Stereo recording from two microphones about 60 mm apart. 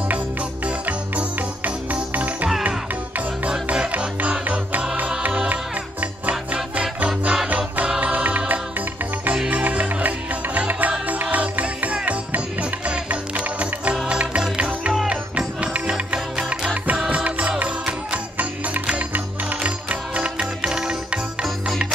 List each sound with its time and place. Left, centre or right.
0.7 s music: right
3.6 s music: right